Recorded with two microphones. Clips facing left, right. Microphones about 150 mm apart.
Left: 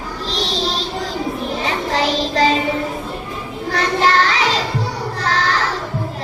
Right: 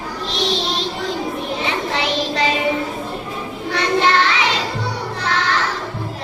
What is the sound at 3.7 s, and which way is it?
Child singing, 40° left (ahead or behind).